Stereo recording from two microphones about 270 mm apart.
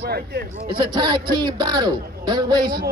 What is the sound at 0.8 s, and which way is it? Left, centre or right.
Speech, centre.